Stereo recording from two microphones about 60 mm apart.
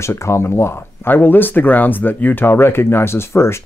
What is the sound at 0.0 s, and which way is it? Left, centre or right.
Speech, left.